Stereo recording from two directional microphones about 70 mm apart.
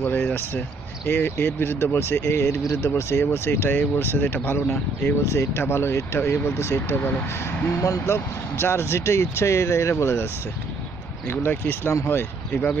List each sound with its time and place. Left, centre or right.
0.1 s speech: left
7.7 s speech: left
8.0 s speech: left
11.2 s speech: left